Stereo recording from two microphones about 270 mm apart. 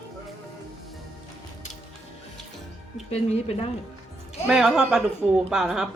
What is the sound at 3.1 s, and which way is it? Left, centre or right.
Speech, left.